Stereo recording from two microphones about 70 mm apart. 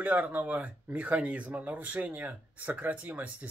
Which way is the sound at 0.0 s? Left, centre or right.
Right.